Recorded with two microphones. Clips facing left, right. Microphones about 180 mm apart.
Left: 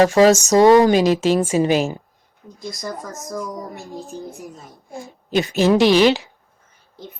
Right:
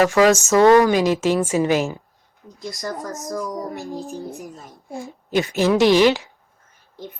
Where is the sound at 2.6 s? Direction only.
Centre (ahead or behind).